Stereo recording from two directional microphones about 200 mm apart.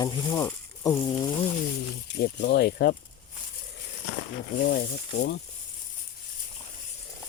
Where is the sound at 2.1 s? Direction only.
55° left (ahead or behind).